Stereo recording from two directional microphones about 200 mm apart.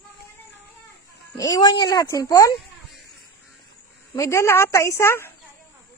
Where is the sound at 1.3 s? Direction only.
20° left (ahead or behind).